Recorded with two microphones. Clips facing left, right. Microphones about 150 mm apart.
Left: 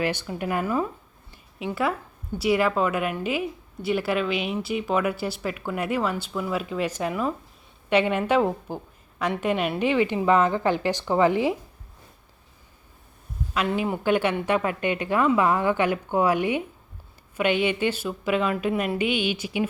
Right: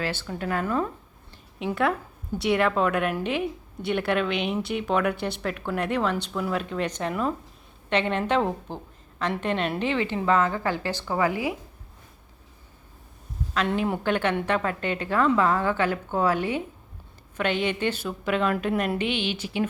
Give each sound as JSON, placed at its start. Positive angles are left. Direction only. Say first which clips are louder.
{"t": 0.0, "sound": "a woman's voice", "louder": "left 3 dB", "side_deg": 15}
{"t": 1.3, "sound": "a sound", "louder": "right 1 dB", "side_deg": 5}
{"t": 2.4, "sound": "a woman's voice", "louder": "left 1 dB", "side_deg": 5}
{"t": 13.5, "sound": "a woman's voice", "louder": "even", "side_deg": 5}